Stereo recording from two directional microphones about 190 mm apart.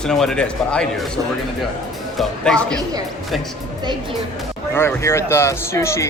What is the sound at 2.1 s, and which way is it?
Speech, 5° left (ahead or behind).